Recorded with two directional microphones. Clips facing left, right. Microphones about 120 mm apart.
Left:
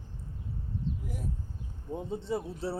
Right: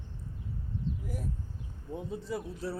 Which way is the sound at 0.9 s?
60° left (ahead or behind).